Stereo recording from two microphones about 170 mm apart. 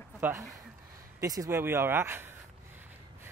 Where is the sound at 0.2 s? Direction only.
15° right (ahead or behind).